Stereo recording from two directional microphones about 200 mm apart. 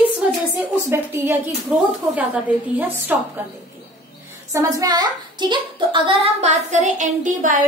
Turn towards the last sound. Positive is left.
turn(degrees=-40)  # may be behind; listen again after turning